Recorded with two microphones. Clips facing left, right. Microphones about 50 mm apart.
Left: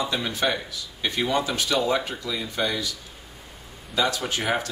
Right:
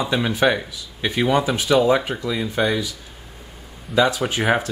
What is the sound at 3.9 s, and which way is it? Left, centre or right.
Speech, right.